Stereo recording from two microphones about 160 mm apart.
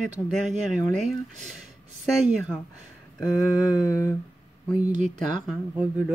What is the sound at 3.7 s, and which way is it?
Humming, 20° left (ahead or behind).